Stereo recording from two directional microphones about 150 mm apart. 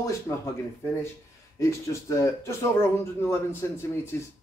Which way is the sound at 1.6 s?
20° left (ahead or behind).